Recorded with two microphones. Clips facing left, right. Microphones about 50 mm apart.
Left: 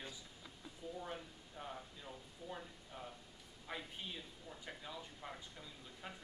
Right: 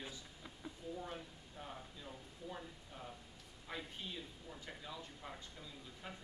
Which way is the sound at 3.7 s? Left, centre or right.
Centre.